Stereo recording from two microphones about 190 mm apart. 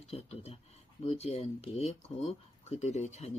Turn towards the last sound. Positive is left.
turn(degrees=35)  # may be behind; listen again after turning